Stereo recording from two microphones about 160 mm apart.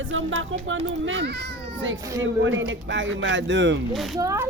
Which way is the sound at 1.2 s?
90° right.